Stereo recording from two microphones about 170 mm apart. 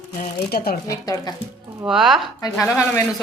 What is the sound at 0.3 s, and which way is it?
Speech, 65° left (ahead or behind).